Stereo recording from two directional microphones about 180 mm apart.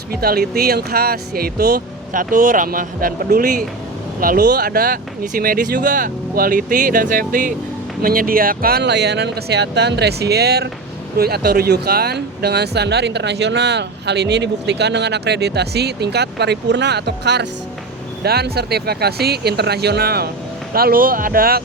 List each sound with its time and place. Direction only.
0.1 s speech: 60° right (ahead or behind)